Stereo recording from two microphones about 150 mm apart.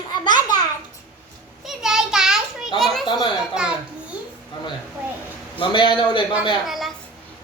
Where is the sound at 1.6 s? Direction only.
5° right (ahead or behind).